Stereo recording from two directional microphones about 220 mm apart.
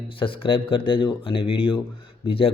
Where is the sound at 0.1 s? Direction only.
25° left (ahead or behind).